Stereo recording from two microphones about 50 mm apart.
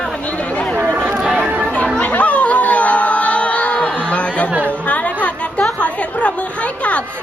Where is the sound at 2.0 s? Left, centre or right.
Left.